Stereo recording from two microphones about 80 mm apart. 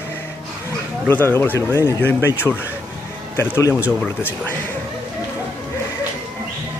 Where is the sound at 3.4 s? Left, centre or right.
Left.